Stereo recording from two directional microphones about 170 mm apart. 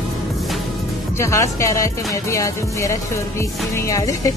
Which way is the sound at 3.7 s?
20° left (ahead or behind).